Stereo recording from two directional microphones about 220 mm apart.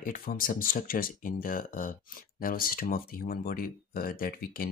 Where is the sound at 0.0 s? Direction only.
40° left (ahead or behind).